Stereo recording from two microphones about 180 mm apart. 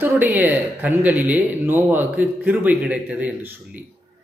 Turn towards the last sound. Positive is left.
turn(degrees=-10)  # may be behind; listen again after turning